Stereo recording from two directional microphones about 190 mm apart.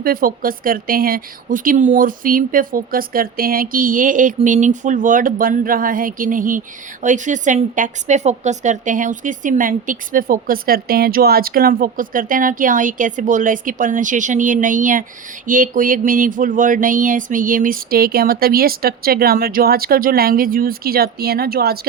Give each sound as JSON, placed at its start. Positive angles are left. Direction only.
{"t": 0.0, "sound": "a woman's voice", "side_deg": -50}